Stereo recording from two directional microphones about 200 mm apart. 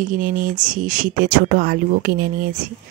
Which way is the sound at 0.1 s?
45° right (ahead or behind).